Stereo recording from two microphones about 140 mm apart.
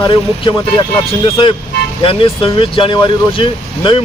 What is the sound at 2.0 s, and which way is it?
Speech, 40° left (ahead or behind).